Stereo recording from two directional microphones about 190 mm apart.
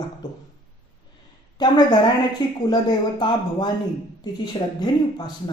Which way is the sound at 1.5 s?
20° left (ahead or behind).